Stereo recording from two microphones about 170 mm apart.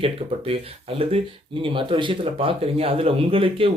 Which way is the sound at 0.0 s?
35° right (ahead or behind).